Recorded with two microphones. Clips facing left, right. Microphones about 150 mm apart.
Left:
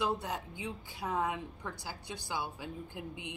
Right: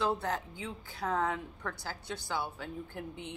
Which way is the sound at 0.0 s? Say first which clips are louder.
Right 2 dB; 15° left (ahead or behind).